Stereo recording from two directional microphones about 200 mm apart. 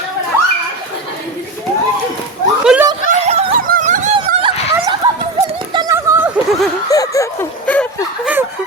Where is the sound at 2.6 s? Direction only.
5° right (ahead or behind).